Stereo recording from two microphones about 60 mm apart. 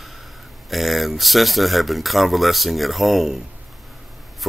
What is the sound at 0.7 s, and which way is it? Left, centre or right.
Speech, centre.